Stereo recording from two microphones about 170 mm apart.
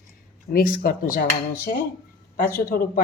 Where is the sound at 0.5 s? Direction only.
60° left (ahead or behind).